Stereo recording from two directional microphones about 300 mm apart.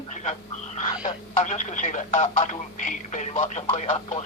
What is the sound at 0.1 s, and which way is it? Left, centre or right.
Frog, left.